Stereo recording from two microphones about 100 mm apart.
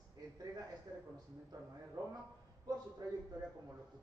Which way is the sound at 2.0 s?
40° right (ahead or behind).